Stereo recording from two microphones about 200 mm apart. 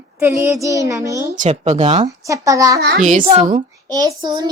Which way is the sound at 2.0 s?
15° right (ahead or behind).